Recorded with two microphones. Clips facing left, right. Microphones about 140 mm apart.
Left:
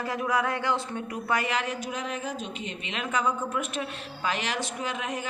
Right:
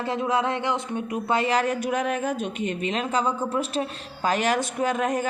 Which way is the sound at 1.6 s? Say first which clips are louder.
Right 7 dB; 55° right (ahead or behind).